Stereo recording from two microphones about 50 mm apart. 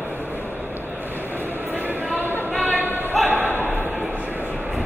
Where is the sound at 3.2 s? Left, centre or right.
Right.